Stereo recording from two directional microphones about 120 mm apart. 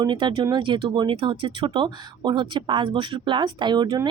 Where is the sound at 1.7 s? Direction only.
40° right (ahead or behind).